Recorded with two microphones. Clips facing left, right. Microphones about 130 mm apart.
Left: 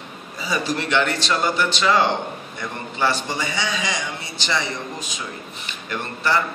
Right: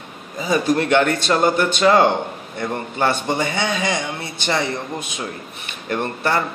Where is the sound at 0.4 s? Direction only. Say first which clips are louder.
Right 6 dB; 50° right (ahead or behind).